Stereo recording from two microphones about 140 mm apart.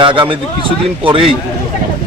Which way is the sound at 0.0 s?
35° right (ahead or behind).